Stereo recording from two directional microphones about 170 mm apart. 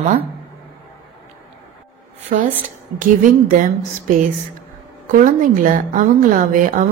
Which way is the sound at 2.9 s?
50° right (ahead or behind).